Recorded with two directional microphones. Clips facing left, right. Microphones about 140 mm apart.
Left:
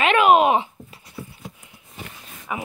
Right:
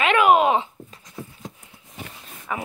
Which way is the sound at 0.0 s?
20° left (ahead or behind).